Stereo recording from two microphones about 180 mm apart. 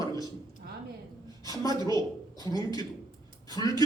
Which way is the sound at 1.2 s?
20° left (ahead or behind).